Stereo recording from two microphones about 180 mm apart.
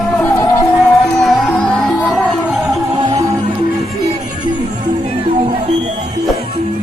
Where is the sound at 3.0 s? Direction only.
20° right (ahead or behind).